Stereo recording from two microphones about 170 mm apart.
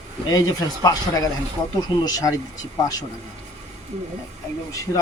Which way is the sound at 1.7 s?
25° left (ahead or behind).